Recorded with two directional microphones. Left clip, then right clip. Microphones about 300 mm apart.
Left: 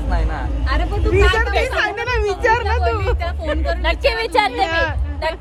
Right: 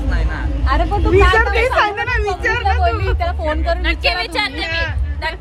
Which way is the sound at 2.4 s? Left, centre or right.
Centre.